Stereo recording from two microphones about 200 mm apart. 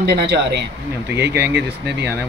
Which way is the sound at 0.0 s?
50° right (ahead or behind).